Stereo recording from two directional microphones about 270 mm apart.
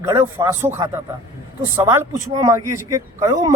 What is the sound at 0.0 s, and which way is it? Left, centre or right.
A man's voice, centre.